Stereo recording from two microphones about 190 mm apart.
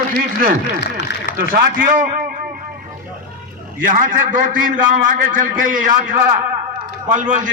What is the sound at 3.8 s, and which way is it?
A man's voice, 45° right (ahead or behind).